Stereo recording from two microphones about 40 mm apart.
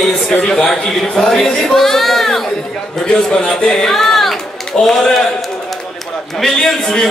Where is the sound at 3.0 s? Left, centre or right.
Left.